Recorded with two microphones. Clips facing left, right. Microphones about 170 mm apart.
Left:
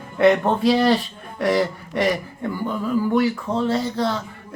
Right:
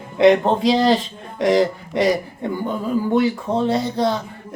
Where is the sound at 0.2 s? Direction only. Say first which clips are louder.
Right 3 dB; 15° right (ahead or behind).